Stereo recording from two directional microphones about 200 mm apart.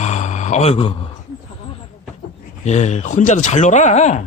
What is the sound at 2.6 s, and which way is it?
Speech, 35° left (ahead or behind).